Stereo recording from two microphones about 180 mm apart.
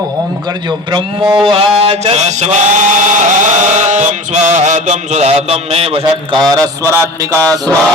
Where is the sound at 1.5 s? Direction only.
30° right (ahead or behind).